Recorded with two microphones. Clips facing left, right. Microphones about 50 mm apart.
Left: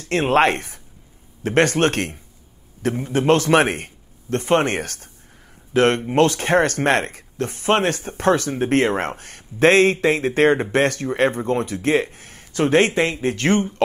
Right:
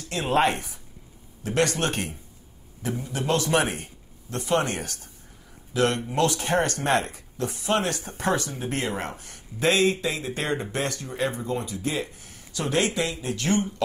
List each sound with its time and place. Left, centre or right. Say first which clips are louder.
0.0 s speech: left 6 dB; left